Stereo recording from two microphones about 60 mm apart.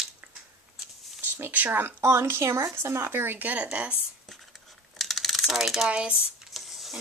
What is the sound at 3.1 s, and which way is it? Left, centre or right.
Speech, right.